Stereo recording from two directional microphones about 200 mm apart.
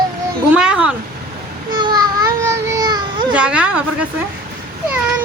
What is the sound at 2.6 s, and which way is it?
Baby cry, 20° right (ahead or behind).